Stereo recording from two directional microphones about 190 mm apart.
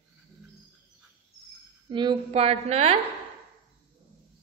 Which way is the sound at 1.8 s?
25° right (ahead or behind).